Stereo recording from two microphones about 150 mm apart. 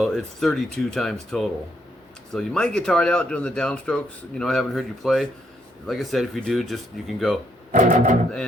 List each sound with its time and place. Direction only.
0.0 s speech: 5° left (ahead or behind)
7.7 s guitar: 55° right (ahead or behind)